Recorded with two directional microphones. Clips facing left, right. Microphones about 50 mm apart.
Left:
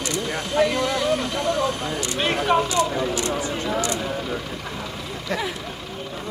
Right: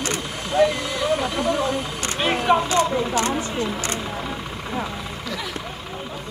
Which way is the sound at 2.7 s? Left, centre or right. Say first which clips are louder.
Right 2 dB; right.